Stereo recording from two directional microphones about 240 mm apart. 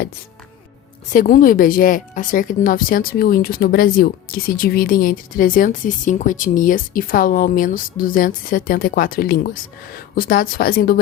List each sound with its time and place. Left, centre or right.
1.1 s speech: left